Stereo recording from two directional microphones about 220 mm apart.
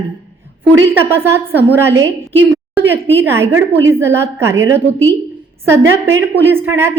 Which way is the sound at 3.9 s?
10° right (ahead or behind).